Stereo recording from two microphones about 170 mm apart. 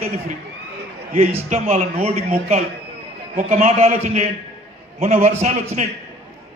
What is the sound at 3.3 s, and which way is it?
A man's voice, 45° right (ahead or behind).